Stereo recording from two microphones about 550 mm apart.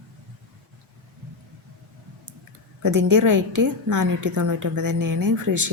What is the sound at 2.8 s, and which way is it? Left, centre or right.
A woman's voice, right.